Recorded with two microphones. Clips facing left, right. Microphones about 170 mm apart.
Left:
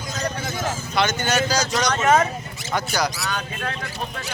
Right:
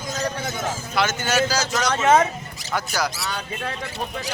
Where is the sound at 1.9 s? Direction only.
25° right (ahead or behind).